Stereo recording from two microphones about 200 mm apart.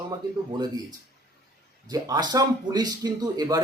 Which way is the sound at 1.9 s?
20° right (ahead or behind).